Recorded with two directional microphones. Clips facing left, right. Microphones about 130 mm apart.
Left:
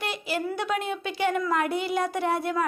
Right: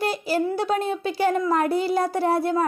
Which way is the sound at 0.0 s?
40° right (ahead or behind).